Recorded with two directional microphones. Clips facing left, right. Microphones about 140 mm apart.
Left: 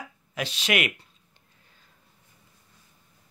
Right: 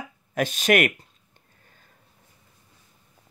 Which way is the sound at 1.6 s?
50° right (ahead or behind).